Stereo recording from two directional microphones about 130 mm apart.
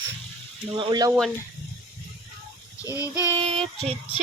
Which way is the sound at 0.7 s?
35° right (ahead or behind).